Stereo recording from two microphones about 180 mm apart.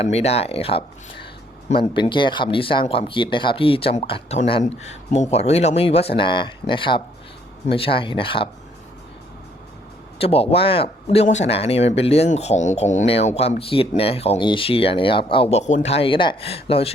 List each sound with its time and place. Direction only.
0.0 s speech: 35° left (ahead or behind)
10.2 s speech: 35° left (ahead or behind)